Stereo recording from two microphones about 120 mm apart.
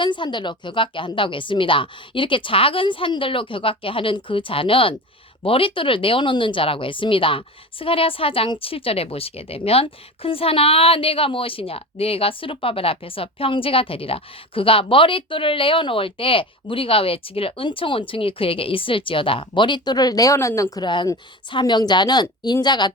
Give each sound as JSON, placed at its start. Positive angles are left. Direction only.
{"t": 0.0, "sound": "speech", "side_deg": 40}